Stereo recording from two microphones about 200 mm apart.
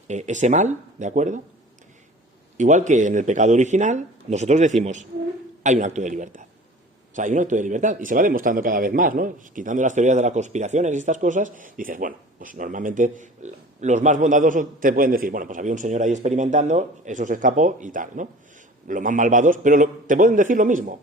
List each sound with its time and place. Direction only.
0.1 s speech: 35° right (ahead or behind)
2.6 s speech: 35° right (ahead or behind)